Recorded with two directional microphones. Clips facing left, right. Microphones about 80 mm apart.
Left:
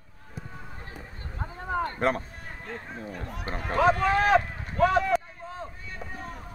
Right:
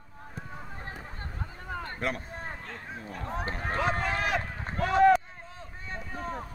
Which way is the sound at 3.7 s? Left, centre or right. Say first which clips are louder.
Left 8 dB; left.